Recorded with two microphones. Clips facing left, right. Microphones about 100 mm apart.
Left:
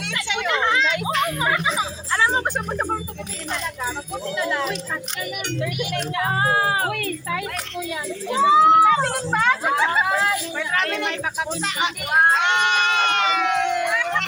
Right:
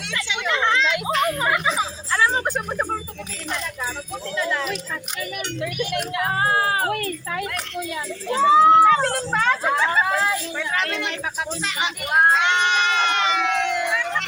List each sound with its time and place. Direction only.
0.5 s speech: 10° left (ahead or behind)
1.1 s speech: 5° right (ahead or behind)
2.1 s speech: 20° left (ahead or behind)
4.4 s speech: 15° left (ahead or behind)
6.3 s speech: 25° left (ahead or behind)
8.3 s speech: 15° left (ahead or behind)
10.8 s speech: 50° left (ahead or behind)
12.3 s goat: 45° left (ahead or behind)